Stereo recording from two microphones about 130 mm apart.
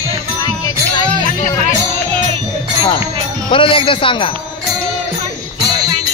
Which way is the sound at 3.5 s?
40° left (ahead or behind).